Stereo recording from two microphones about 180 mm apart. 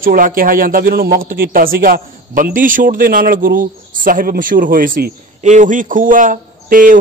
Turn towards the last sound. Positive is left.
turn(degrees=-50)  # may be behind; listen again after turning